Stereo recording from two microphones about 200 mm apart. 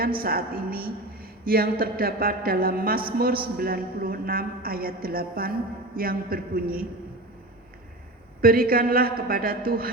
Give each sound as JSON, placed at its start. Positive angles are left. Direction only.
{"t": 0.0, "sound": "a woman's voice", "side_deg": -50}
{"t": 8.4, "sound": "a man's voice", "side_deg": -45}